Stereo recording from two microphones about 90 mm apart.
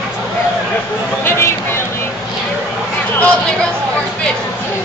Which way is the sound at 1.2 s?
30° left (ahead or behind).